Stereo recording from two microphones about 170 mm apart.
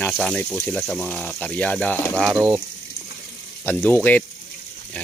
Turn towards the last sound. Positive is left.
turn(degrees=10)  # may be behind; listen again after turning